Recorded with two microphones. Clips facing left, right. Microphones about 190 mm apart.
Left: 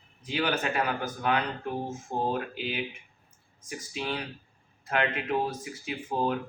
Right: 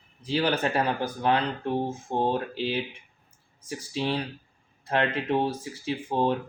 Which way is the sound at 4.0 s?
30° right (ahead or behind).